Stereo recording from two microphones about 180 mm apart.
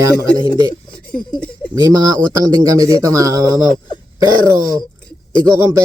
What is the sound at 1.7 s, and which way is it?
A man's voice, 20° right (ahead or behind).